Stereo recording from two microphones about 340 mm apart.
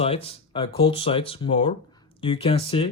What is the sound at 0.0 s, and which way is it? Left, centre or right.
Speech, centre.